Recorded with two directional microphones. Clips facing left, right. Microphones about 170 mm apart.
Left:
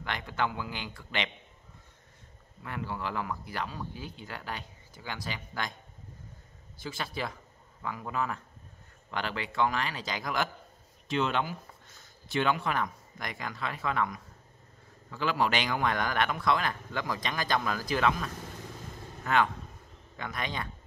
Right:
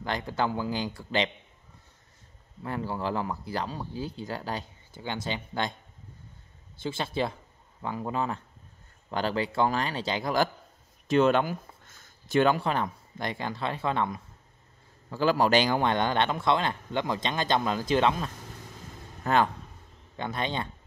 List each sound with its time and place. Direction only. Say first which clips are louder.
0.0 s speech: right 4 dB; 35° right (ahead or behind)
2.6 s speech: right 5 dB; 30° right (ahead or behind)
6.8 s a man's voice: right 6 dB; 25° right (ahead or behind)
11.1 s a man's voice: right 7 dB; 45° right (ahead or behind); by 20.6 s 30° right (ahead or behind)